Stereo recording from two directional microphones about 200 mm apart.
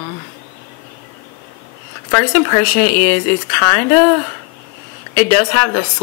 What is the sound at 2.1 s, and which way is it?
Speech, 15° left (ahead or behind).